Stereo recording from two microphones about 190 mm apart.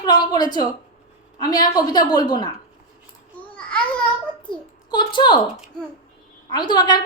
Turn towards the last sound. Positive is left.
turn(degrees=25)  # may be behind; listen again after turning